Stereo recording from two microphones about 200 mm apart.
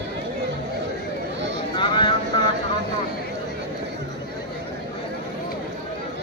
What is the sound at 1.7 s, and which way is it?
Vehicle, 25° left (ahead or behind).